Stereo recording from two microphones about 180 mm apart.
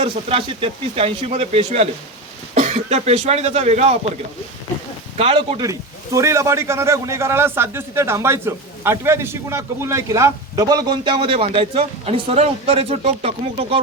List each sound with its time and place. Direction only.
0.0 s speech: 30° right (ahead or behind)
5.1 s speech: 30° right (ahead or behind)
6.1 s a man's voice: 15° right (ahead or behind); by 13.7 s 35° right (ahead or behind)